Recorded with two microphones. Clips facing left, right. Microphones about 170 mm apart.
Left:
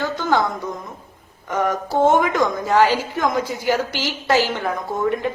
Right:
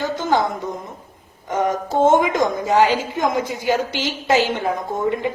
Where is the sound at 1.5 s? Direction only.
20° right (ahead or behind).